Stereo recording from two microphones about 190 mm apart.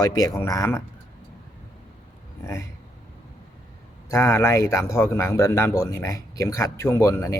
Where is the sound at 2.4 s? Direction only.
15° left (ahead or behind).